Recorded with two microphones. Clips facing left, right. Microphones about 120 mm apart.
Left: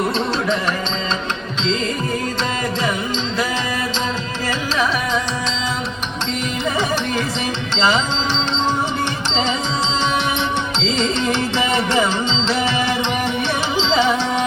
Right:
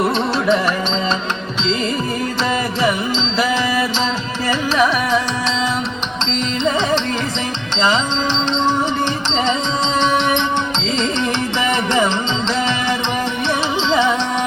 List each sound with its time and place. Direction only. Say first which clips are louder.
7.7 s music: right 1 dB; 20° right (ahead or behind)
13.8 s music: right 1 dB; 15° left (ahead or behind)